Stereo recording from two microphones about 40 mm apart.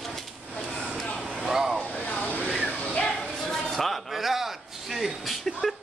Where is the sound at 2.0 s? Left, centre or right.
Left.